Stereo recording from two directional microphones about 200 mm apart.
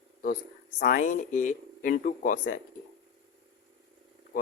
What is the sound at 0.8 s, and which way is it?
Speech, 40° left (ahead or behind).